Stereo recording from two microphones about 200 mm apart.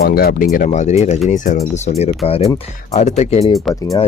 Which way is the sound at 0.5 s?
40° left (ahead or behind).